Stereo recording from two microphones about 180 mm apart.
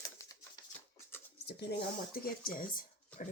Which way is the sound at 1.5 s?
65° left (ahead or behind).